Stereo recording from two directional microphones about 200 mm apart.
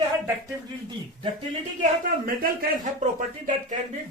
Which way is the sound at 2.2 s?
40° right (ahead or behind).